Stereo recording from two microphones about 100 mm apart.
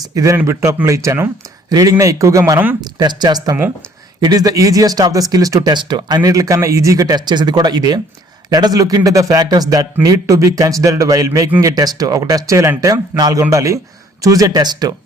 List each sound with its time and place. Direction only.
0.1 s speech: 35° right (ahead or behind)
2.8 s speech: 45° right (ahead or behind)